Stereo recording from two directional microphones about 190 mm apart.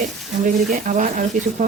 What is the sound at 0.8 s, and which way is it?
Speech, 40° right (ahead or behind).